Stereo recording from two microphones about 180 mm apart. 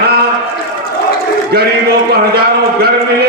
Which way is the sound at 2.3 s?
60° right (ahead or behind).